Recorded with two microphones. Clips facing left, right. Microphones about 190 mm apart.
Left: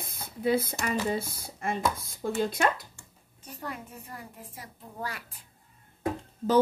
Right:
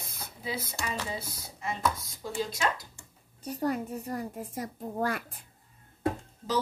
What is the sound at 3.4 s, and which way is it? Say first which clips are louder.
A child's voice: right 9 dB; 40° right (ahead or behind).